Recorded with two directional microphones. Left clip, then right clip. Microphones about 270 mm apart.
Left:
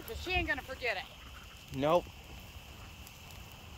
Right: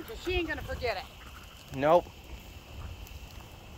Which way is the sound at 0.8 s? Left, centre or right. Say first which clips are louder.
Right 5 dB; centre.